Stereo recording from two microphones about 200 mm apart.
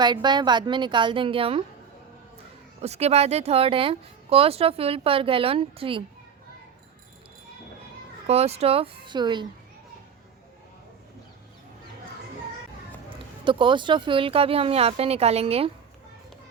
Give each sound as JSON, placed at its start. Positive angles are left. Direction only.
{"t": 0.0, "sound": "speech", "side_deg": -20}
{"t": 2.8, "sound": "speech", "side_deg": -30}
{"t": 8.3, "sound": "speech", "side_deg": -30}
{"t": 13.4, "sound": "speech", "side_deg": -25}